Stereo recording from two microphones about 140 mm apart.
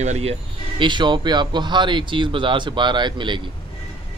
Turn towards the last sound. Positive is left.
turn(degrees=-35)  # may be behind; listen again after turning